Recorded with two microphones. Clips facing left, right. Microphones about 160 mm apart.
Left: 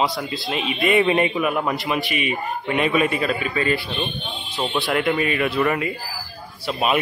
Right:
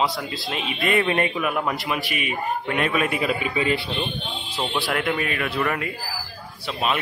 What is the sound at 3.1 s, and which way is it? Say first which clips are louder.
Speech: left 1 dB; 15° right (ahead or behind).